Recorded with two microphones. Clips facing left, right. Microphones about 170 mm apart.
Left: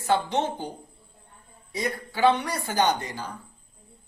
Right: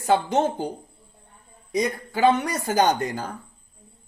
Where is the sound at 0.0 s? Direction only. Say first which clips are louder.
Right 4 dB; 45° right (ahead or behind).